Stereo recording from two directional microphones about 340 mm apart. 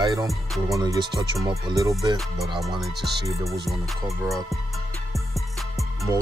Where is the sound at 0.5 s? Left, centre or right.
Centre.